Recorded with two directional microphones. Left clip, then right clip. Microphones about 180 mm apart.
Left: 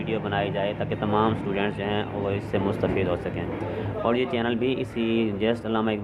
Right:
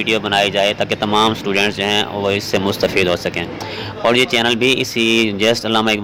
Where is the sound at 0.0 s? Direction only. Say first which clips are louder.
Right 12 dB; 40° right (ahead or behind).